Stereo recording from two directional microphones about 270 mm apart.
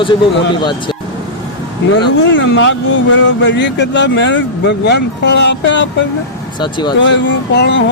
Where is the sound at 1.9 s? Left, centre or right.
Left.